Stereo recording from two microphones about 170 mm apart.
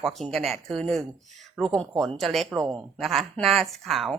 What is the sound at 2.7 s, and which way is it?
A woman's voice, centre (ahead or behind).